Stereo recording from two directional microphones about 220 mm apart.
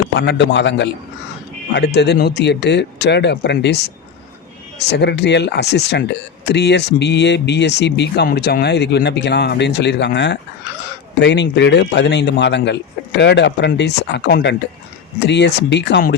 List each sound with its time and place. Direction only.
0.1 s speech: 50° left (ahead or behind)